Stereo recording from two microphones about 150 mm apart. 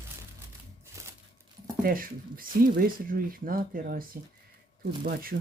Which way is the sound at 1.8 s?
70° right (ahead or behind).